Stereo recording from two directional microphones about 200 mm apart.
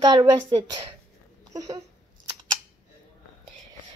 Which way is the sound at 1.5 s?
20° right (ahead or behind).